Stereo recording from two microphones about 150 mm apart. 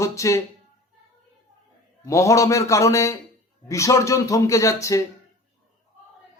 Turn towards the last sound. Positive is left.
turn(degrees=20)  # may be behind; listen again after turning